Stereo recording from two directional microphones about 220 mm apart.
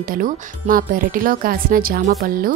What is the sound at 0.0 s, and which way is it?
Speech, 40° right (ahead or behind).